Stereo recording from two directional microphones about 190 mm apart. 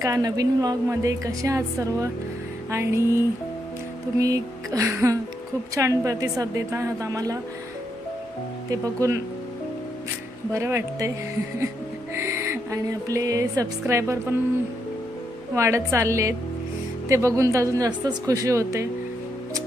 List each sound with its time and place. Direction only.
0.0 s a woman's voice: 20° right (ahead or behind)
4.2 s a woman's voice: 15° right (ahead or behind)
8.7 s a woman's voice: 15° right (ahead or behind)
10.5 s a woman's voice: 15° right (ahead or behind)
12.1 s speech: 15° right (ahead or behind)
15.5 s a woman's voice: 15° right (ahead or behind)